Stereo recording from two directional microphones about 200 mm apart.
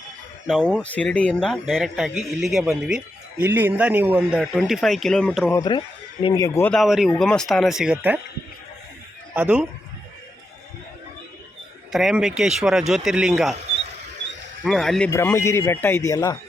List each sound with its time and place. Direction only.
0.4 s speech: centre (ahead or behind)
5.5 s speech: 20° left (ahead or behind); by 8.2 s 5° right (ahead or behind)
9.3 s a man's voice: 10° right (ahead or behind)
11.9 s speech: centre (ahead or behind)
14.6 s speech: centre (ahead or behind)
15.1 s speech: 15° left (ahead or behind)